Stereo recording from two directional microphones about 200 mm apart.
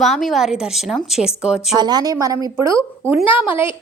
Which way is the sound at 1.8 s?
20° right (ahead or behind).